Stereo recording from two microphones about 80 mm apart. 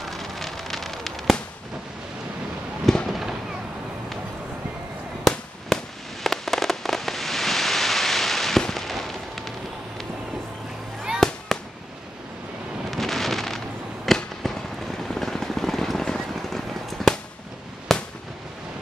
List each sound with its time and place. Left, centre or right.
0.0 s fireworks: centre
2.9 s fireworks: centre
5.2 s fireworks: centre
11.1 s fireworks: centre
12.9 s a sound: centre
14.0 s fireworks: centre
15.0 s vehicle: centre
17.9 s fireworks: centre